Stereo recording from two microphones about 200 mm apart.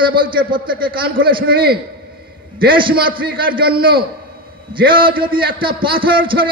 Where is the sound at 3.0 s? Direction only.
45° right (ahead or behind).